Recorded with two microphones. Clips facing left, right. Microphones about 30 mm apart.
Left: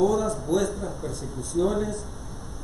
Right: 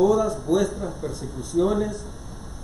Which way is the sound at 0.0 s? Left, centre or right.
Centre.